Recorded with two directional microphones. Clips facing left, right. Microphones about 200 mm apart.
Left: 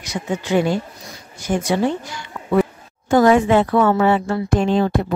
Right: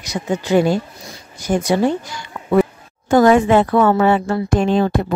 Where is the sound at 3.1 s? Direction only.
45° right (ahead or behind).